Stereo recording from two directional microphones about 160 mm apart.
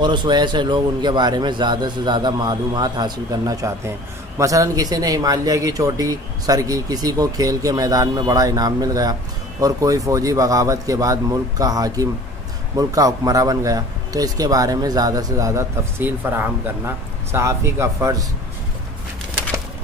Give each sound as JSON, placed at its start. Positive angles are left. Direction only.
{"t": 0.0, "sound": "a man's voice", "side_deg": -30}